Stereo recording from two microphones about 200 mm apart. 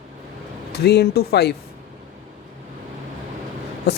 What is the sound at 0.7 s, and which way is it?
Speech, 55° left (ahead or behind).